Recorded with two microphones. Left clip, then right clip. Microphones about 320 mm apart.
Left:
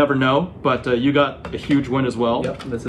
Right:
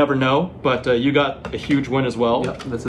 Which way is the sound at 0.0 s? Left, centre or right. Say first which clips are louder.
Even; centre.